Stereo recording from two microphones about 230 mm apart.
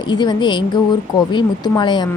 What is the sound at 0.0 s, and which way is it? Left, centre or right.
A woman's voice, centre.